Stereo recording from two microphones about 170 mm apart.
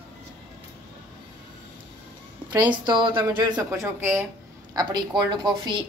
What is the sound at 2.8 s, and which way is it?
A woman's voice, 30° right (ahead or behind).